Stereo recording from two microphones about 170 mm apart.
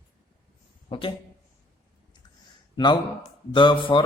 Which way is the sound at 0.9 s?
30° left (ahead or behind).